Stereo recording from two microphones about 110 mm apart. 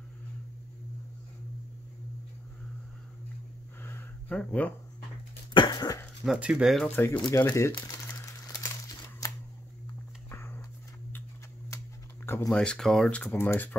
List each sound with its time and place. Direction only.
4.3 s speech: 10° left (ahead or behind)
5.5 s cough: 40° left (ahead or behind)
6.2 s speech: 10° right (ahead or behind)
6.8 s speech: 20° left (ahead or behind)
7.8 s crumpling: 30° left (ahead or behind)
10.3 s a sound: 20° left (ahead or behind)
12.4 s speech: 5° left (ahead or behind)
13.2 s speech: 20° left (ahead or behind)